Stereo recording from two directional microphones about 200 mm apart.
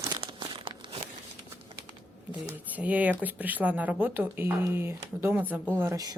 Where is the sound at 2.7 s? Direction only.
5° right (ahead or behind).